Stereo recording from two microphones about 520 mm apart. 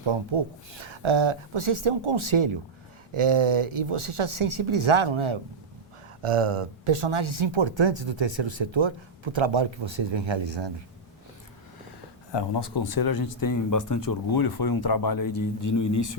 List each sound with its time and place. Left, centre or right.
0.0 s speech: right
12.3 s speech: left